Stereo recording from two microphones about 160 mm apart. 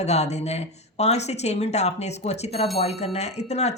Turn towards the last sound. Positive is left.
turn(degrees=45)  # may be behind; listen again after turning